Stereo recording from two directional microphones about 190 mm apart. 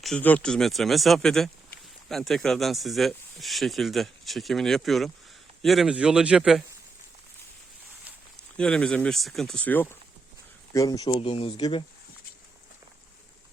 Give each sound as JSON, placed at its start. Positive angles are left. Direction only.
{"t": 0.0, "sound": "speech", "side_deg": 5}
{"t": 8.5, "sound": "speech", "side_deg": 5}